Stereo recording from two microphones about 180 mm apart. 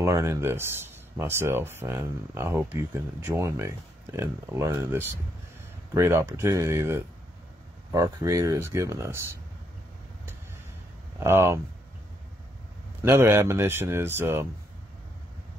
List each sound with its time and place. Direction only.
0.0 s speech: 15° right (ahead or behind)
11.1 s speech: 15° right (ahead or behind)
13.0 s speech: 15° right (ahead or behind)